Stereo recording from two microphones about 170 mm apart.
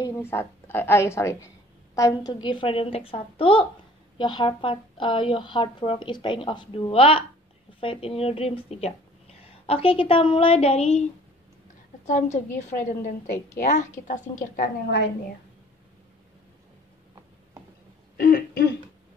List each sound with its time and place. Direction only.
0.0 s a woman's voice: 15° left (ahead or behind); by 11.1 s 40° left (ahead or behind)
12.1 s a woman's voice: 45° left (ahead or behind)
18.1 s throat clearing: 60° left (ahead or behind)